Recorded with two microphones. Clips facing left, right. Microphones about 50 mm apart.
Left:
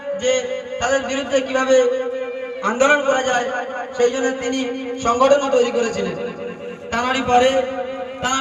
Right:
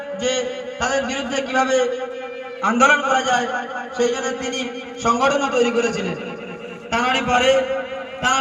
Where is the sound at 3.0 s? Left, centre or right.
Right.